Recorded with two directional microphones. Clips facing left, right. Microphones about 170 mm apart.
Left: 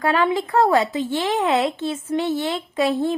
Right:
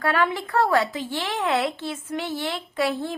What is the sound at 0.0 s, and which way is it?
A woman's voice, 20° left (ahead or behind).